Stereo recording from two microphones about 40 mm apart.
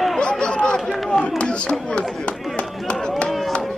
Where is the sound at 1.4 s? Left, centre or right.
Left.